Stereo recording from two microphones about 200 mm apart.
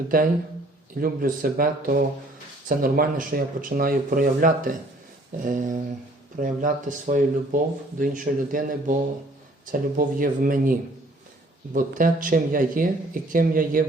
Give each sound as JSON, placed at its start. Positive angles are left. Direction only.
{"t": 0.1, "sound": "speech", "side_deg": -45}